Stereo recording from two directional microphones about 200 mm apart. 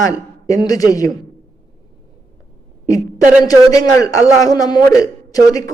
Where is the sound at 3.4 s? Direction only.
20° left (ahead or behind).